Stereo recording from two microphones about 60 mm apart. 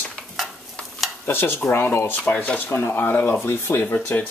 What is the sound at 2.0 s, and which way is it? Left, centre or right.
Speech, left.